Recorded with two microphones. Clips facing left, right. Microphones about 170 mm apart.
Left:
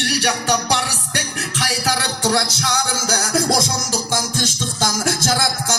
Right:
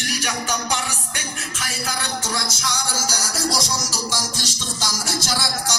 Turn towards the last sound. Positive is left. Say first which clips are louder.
# left 5 dB
turn(degrees=50)  # may be behind; listen again after turning